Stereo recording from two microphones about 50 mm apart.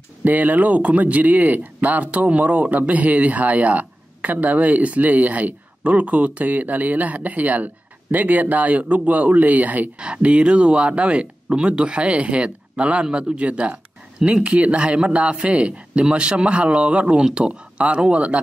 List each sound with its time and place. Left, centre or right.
0.2 s speech: right